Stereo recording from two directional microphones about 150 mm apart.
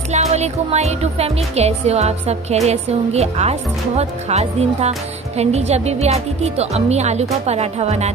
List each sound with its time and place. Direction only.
0.1 s speech: 45° right (ahead or behind)